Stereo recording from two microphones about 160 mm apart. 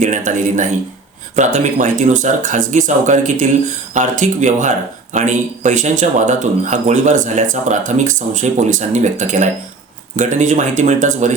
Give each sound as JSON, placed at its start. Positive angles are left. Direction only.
{"t": 0.0, "sound": "speech", "side_deg": -50}